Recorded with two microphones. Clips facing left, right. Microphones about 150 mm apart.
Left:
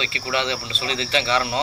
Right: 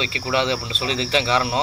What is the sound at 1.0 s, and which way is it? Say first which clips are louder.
Speech: right 1 dB; 5° right (ahead or behind).